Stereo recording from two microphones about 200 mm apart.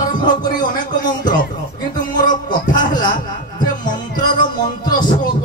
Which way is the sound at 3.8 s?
40° left (ahead or behind).